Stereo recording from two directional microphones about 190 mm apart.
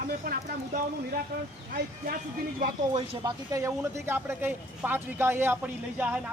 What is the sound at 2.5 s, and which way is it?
Speech, 45° right (ahead or behind).